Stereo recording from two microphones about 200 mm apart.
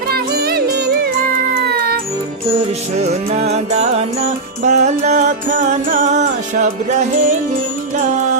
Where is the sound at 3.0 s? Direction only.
35° right (ahead or behind).